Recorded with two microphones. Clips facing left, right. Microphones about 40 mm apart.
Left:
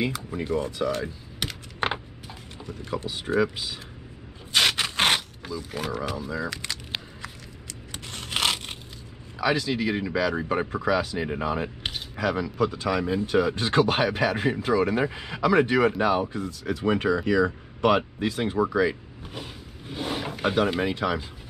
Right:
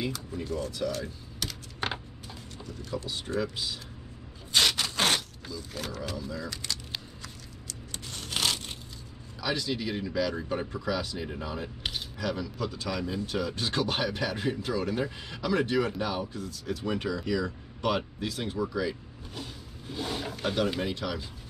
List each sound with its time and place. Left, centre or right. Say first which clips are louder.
0.0 s speech: left 5 dB; left
0.4 s typing: left 6 dB; left
3.1 s speech: left 8 dB; centre
4.6 s a sound: left 3 dB; left
9.4 s speech: left 7 dB; left